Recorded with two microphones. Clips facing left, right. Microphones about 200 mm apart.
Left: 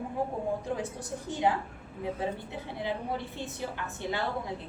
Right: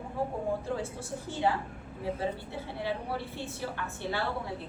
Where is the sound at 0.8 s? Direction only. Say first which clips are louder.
Left 1 dB; 15° left (ahead or behind).